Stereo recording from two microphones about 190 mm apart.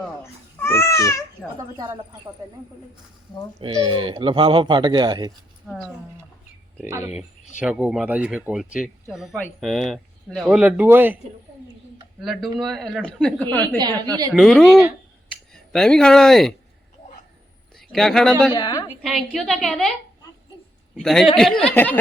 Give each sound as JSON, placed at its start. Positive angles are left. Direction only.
{"t": 0.6, "sound": "speech", "side_deg": 15}
{"t": 3.6, "sound": "speech", "side_deg": -25}
{"t": 5.6, "sound": "speech", "side_deg": 0}
{"t": 7.6, "sound": "speech", "side_deg": -5}
{"t": 12.2, "sound": "speech", "side_deg": 0}
{"t": 13.7, "sound": "speech", "side_deg": -20}
{"t": 14.3, "sound": "speech", "side_deg": 0}
{"t": 17.7, "sound": "speech", "side_deg": 0}
{"t": 18.5, "sound": "a woman's voice", "side_deg": 20}
{"t": 18.9, "sound": "speech", "side_deg": 0}
{"t": 20.9, "sound": "speech", "side_deg": 0}